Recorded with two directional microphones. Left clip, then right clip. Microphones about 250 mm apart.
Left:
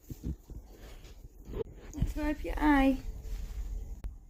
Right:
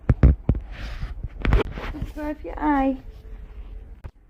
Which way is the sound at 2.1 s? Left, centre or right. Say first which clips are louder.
Right 3 dB; left.